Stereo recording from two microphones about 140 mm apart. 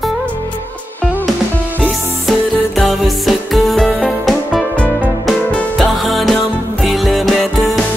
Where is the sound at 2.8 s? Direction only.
Centre (ahead or behind).